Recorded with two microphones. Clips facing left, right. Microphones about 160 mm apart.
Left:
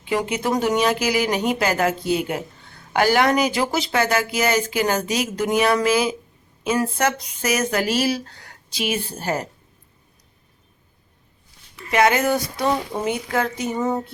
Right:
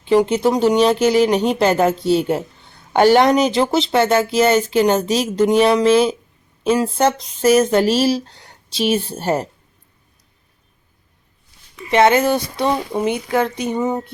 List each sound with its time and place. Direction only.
0.1 s speech: 30° right (ahead or behind)
11.9 s speech: 25° right (ahead or behind)